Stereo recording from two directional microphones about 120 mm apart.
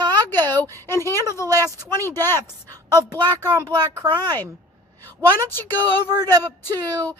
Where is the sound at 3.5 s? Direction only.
35° right (ahead or behind).